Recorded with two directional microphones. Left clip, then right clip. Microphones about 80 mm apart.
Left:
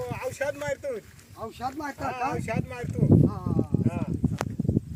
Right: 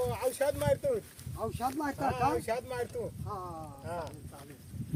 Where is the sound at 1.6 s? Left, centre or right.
Left.